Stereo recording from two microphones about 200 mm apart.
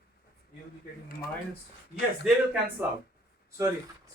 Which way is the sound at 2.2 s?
5° right (ahead or behind).